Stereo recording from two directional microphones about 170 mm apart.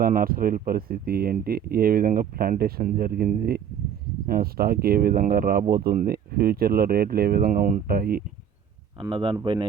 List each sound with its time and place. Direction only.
0.0 s speech: 55° right (ahead or behind)
9.0 s speech: 30° right (ahead or behind)